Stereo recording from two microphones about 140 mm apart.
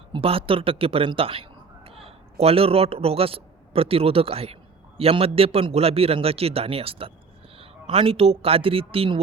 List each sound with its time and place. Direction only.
0.1 s a man's voice: 40° right (ahead or behind)